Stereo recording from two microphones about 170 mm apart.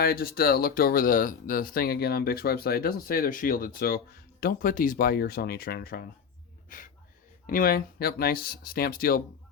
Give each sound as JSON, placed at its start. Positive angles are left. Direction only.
{"t": 0.0, "sound": "speech", "side_deg": 60}